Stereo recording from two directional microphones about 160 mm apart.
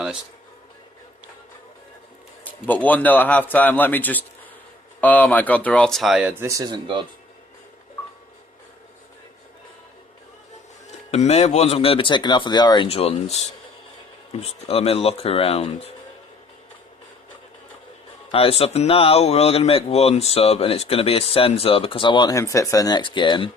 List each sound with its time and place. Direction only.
2.4 s a man's voice: 10° left (ahead or behind); by 7.0 s 30° right (ahead or behind)
11.1 s speech: 40° left (ahead or behind)
14.4 s speech: 40° left (ahead or behind)
18.3 s speech: 35° left (ahead or behind)